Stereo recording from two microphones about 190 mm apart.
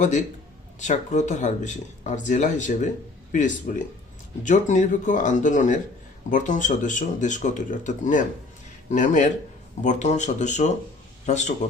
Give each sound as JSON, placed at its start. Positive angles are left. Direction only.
{"t": 0.8, "sound": "speech", "side_deg": 40}